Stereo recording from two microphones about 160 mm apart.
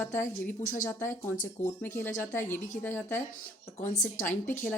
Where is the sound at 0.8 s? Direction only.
15° left (ahead or behind).